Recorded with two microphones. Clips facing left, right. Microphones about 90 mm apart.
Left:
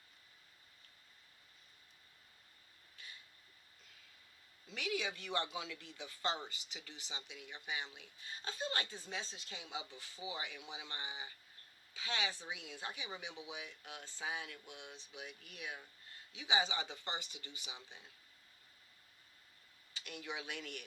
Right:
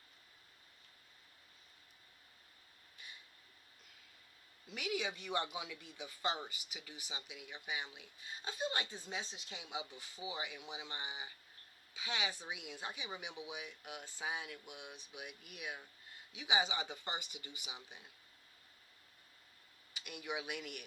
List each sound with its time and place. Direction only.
4.6 s speech: 15° right (ahead or behind)
19.9 s speech: 15° right (ahead or behind)